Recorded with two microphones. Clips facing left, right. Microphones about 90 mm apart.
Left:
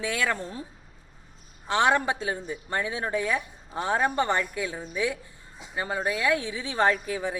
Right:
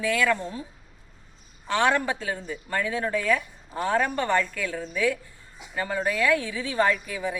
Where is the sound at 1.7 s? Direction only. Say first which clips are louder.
Even; 20° left (ahead or behind); by 7.3 s 35° left (ahead or behind).